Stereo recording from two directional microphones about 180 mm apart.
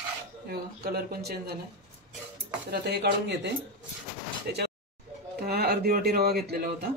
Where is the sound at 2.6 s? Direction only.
65° right (ahead or behind).